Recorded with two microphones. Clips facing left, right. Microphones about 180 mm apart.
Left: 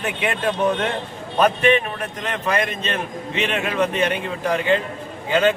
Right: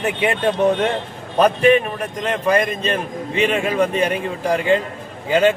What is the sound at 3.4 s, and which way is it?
Speech, 45° right (ahead or behind).